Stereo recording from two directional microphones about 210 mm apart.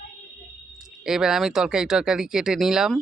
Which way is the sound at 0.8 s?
5° right (ahead or behind).